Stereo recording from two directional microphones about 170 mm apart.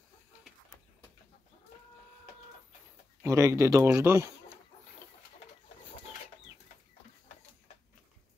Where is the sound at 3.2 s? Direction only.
20° right (ahead or behind).